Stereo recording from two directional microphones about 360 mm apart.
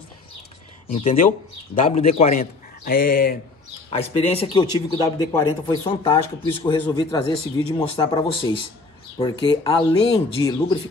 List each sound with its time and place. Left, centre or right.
0.8 s a man's voice: centre